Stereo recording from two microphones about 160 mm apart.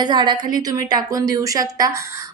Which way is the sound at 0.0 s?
25° right (ahead or behind).